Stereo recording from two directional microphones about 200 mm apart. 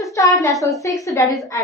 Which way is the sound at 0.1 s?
15° left (ahead or behind).